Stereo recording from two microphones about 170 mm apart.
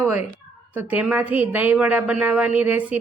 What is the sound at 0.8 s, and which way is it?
A woman's voice, 10° right (ahead or behind).